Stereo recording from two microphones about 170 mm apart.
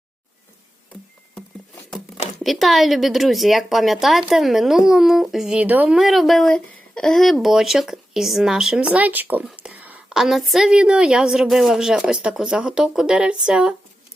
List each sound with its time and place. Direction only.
1.4 s patter: 5° left (ahead or behind)
2.4 s speech: centre (ahead or behind)